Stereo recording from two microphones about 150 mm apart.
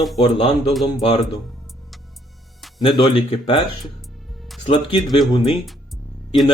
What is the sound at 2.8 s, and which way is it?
Speech, 30° left (ahead or behind).